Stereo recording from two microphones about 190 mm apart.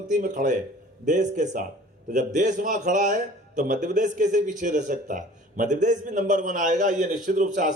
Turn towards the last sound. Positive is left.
turn(degrees=-40)  # may be behind; listen again after turning